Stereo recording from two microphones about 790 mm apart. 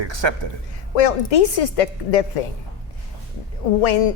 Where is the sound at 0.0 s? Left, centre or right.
Right.